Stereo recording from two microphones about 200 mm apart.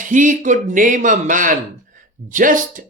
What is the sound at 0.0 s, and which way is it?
Speech, 40° right (ahead or behind).